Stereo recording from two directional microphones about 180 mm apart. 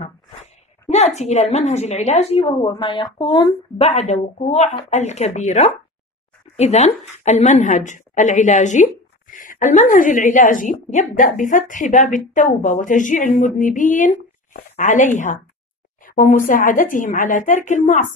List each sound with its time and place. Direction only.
0.8 s a woman's voice: 40° left (ahead or behind)